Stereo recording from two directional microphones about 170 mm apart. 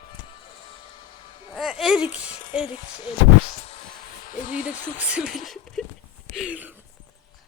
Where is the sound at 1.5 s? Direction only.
Centre (ahead or behind).